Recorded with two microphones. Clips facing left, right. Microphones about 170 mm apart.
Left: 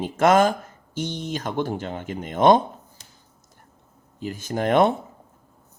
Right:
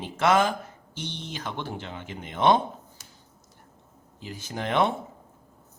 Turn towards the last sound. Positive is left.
turn(degrees=50)  # may be behind; listen again after turning